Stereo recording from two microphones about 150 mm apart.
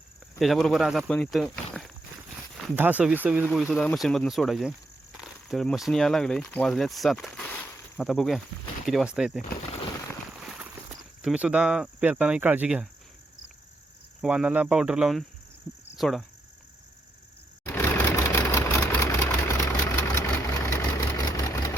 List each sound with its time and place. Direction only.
0.3 s speech: centre (ahead or behind)
2.7 s speech: 10° right (ahead or behind)
10.4 s a sound: centre (ahead or behind)
11.2 s speech: 5° right (ahead or behind)
14.2 s speech: 5° right (ahead or behind)
17.7 s engine: 15° left (ahead or behind)